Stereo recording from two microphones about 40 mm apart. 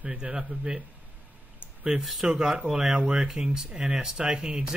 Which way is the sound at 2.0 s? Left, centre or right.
Centre.